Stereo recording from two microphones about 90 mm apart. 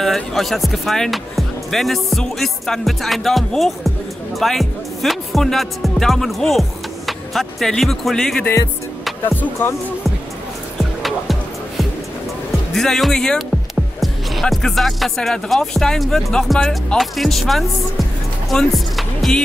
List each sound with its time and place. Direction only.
0.0 s speech: centre (ahead or behind)
9.2 s music: 20° left (ahead or behind)
10.8 s music: centre (ahead or behind)
12.7 s speech: 5° left (ahead or behind)
18.5 s music: 5° left (ahead or behind)